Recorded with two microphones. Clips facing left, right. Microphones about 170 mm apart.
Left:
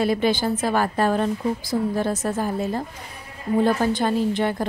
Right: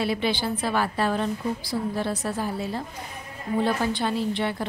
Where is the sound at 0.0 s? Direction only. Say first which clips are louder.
Left 5 dB; 45° left (ahead or behind).